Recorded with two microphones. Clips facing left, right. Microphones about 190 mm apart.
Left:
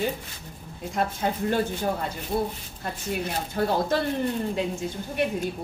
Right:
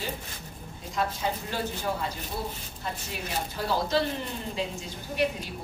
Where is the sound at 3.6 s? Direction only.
55° left (ahead or behind).